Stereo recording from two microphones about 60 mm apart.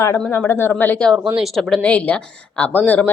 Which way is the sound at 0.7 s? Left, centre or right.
Left.